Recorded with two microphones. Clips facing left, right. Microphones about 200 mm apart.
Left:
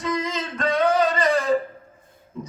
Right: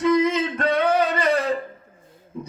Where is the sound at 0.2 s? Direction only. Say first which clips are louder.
Right 6 dB; 60° right (ahead or behind).